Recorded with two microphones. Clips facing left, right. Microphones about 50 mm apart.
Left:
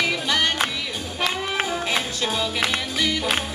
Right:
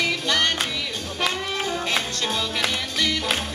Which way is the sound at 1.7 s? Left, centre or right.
Centre.